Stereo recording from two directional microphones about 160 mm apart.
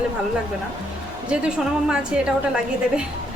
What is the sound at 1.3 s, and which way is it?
A woman's voice, 5° right (ahead or behind).